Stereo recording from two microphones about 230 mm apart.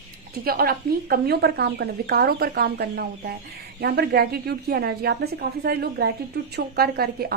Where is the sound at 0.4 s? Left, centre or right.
Right.